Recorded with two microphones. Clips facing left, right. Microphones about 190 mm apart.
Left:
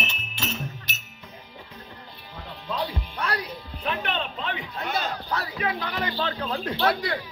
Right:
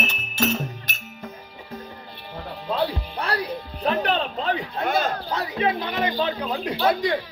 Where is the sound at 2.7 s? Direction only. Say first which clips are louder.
Right 5 dB; 30° right (ahead or behind).